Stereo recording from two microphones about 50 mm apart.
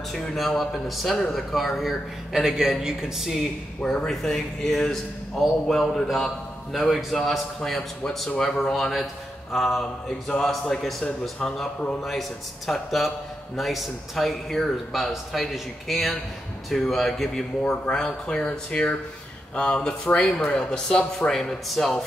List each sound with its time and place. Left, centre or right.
0.1 s a man's voice: centre
4.1 s a man's voice: centre
8.9 s a man's voice: centre